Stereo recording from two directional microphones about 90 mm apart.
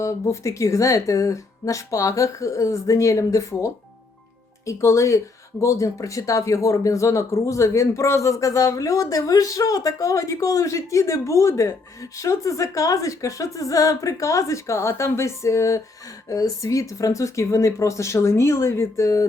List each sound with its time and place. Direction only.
0.0 s speech: 35° left (ahead or behind)